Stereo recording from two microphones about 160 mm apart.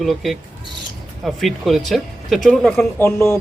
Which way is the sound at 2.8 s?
15° left (ahead or behind).